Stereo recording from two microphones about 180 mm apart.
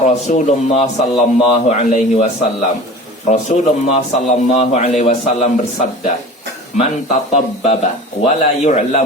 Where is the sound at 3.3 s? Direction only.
40° left (ahead or behind).